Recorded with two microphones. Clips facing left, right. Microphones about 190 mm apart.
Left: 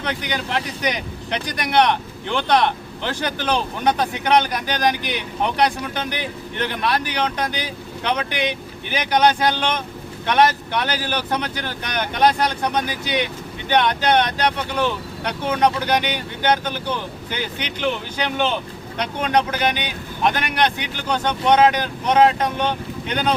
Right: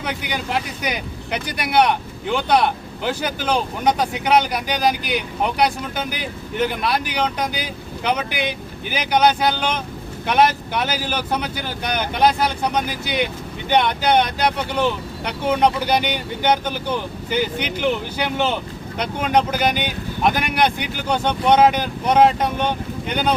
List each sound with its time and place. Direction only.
0.0 s speech: 10° right (ahead or behind)